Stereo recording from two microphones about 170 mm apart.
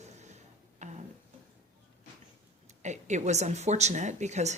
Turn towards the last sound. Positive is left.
turn(degrees=-40)  # may be behind; listen again after turning